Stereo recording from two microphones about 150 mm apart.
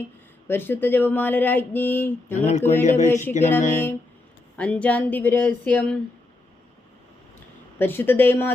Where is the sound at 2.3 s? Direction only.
50° left (ahead or behind).